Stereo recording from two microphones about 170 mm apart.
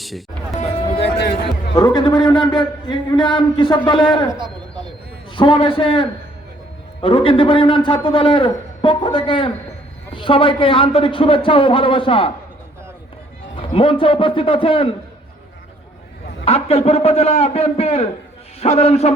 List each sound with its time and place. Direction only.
1.7 s a man's voice: 25° left (ahead or behind)
4.4 s a sound: 25° right (ahead or behind)
5.3 s a man's voice: 30° left (ahead or behind)
13.6 s a man's voice: 30° left (ahead or behind)
16.5 s a man's voice: 35° left (ahead or behind)